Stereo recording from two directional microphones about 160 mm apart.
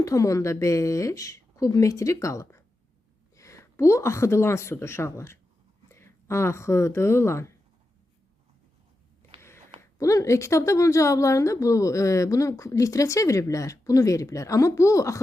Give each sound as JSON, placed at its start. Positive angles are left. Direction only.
{"t": 0.0, "sound": "a woman's voice", "side_deg": 20}
{"t": 10.0, "sound": "speech", "side_deg": 20}